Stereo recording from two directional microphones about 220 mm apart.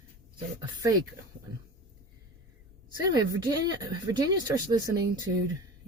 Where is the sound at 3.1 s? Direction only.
15° right (ahead or behind).